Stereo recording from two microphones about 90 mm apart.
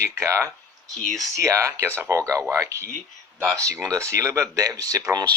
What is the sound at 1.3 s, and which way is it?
Speech, 35° right (ahead or behind).